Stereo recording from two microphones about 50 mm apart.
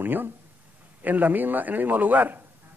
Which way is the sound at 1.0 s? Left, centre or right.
Right.